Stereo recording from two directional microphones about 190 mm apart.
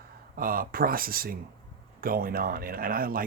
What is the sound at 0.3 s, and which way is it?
Speech, 50° right (ahead or behind).